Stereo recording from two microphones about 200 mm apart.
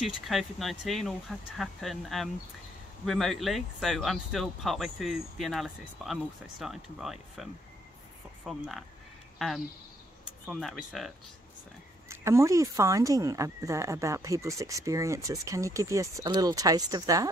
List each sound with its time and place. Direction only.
0.0 s speech: centre (ahead or behind)
8.5 s speech: centre (ahead or behind)
10.4 s speech: centre (ahead or behind)
12.1 s speech: 15° right (ahead or behind)